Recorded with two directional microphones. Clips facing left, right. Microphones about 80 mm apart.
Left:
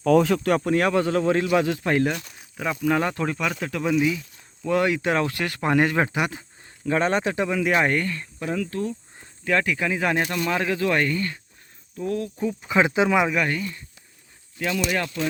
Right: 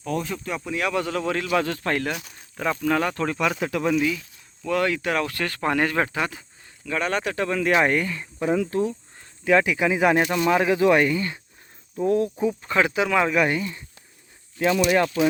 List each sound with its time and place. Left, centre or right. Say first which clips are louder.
0.0 s speech: left 10 dB; left
0.9 s speech: left 4 dB; left
1.5 s speech: left 3 dB; centre
2.1 s speech: left 1 dB; centre
2.4 s speech: right 2 dB; centre
3.2 s speech: right 2 dB; centre
4.6 s speech: left 2 dB; left
7.4 s speech: right 4 dB; centre
11.9 s speech: right 6 dB; right
12.7 s speech: left 3 dB; left
13.4 s speech: right 3 dB; centre
14.8 s speech: right 6 dB; right